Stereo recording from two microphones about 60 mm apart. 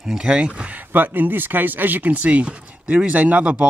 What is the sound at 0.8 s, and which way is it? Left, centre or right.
Speech, right.